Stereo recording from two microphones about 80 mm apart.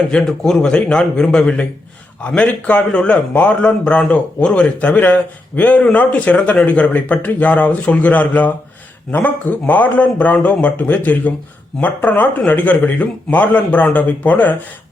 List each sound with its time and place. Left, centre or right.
0.1 s a man's voice: centre